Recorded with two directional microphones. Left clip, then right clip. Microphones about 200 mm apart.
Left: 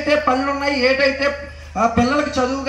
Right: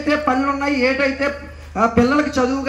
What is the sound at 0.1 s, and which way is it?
A man's voice, 10° left (ahead or behind).